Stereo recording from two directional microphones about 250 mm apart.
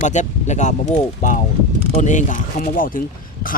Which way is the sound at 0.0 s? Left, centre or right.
Left.